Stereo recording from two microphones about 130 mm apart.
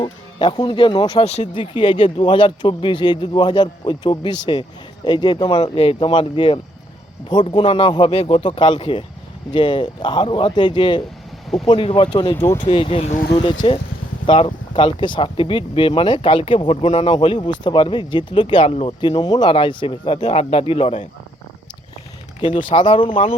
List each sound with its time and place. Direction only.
0.0 s speech: 35° left (ahead or behind)
1.2 s speech: 55° left (ahead or behind)
13.3 s speech: 35° left (ahead or behind)
22.4 s speech: 40° left (ahead or behind)